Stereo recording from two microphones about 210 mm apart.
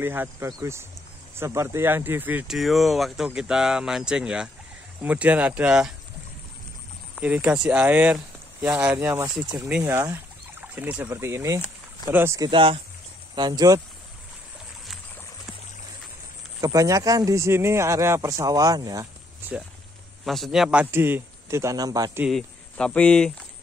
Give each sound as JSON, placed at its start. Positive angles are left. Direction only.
{"t": 0.0, "sound": "speech", "side_deg": -10}
{"t": 7.2, "sound": "speech", "side_deg": -5}
{"t": 16.6, "sound": "speech", "side_deg": -15}
{"t": 20.2, "sound": "speech", "side_deg": 0}
{"t": 22.2, "sound": "speech", "side_deg": 0}